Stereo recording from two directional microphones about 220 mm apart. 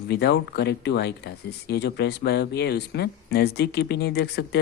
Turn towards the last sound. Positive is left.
turn(degrees=45)  # may be behind; listen again after turning